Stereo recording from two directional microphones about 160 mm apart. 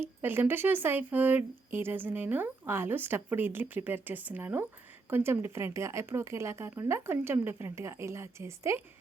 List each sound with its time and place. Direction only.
0.0 s speech: 15° right (ahead or behind)